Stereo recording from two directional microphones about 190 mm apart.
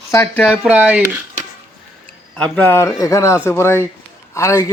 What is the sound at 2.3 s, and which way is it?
A man's voice, 5° left (ahead or behind).